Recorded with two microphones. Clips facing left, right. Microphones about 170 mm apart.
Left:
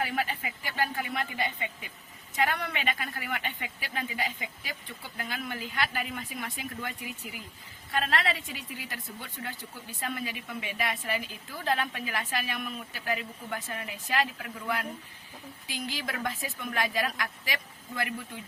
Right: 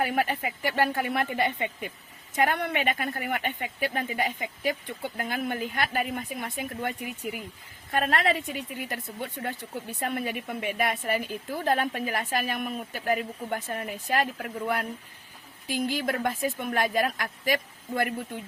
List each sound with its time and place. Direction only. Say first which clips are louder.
0.0 s a woman's voice: right 5 dB; 55° right (ahead or behind)